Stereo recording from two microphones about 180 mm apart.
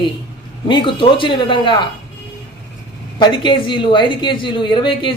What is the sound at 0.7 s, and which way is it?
Speech, 25° left (ahead or behind).